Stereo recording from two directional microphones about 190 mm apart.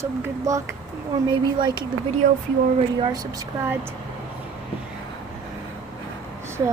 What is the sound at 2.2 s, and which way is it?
Speech, 45° right (ahead or behind).